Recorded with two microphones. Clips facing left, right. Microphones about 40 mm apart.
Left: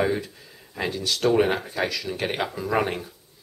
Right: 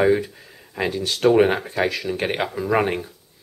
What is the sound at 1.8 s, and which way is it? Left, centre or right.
Speech, right.